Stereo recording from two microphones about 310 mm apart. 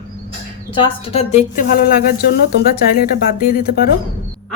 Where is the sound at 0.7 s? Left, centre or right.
Centre.